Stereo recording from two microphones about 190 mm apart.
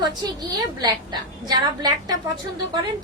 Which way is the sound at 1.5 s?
20° right (ahead or behind).